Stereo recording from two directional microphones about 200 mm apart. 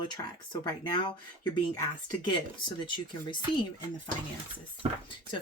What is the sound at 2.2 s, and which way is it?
Speech, 25° left (ahead or behind).